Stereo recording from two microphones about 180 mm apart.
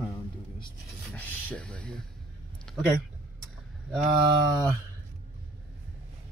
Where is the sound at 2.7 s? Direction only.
5° left (ahead or behind).